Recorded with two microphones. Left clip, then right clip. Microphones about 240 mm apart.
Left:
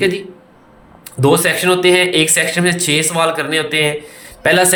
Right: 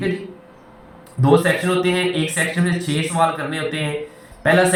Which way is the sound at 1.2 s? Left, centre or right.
Left.